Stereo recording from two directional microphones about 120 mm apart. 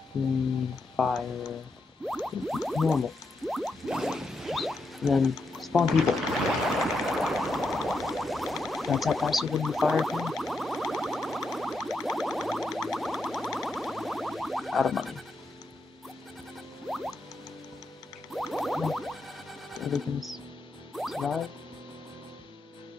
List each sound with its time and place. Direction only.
0.9 s speech: centre (ahead or behind)
2.0 s music: centre (ahead or behind)
6.8 s a sound: centre (ahead or behind)
16.9 s music: centre (ahead or behind)
18.3 s music: centre (ahead or behind)